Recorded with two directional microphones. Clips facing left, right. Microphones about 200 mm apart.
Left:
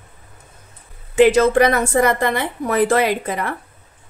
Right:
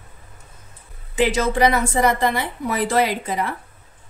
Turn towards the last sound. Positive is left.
turn(degrees=55)  # may be behind; listen again after turning